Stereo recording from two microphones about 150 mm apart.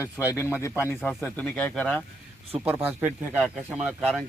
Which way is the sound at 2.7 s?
10° right (ahead or behind).